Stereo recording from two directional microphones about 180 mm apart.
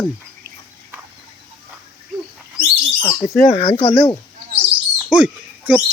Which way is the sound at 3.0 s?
20° left (ahead or behind).